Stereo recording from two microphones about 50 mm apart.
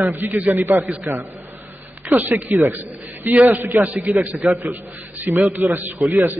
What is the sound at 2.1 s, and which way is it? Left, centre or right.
A man's voice, right.